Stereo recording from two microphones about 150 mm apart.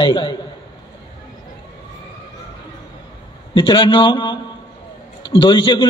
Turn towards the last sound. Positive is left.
turn(degrees=30)  # may be behind; listen again after turning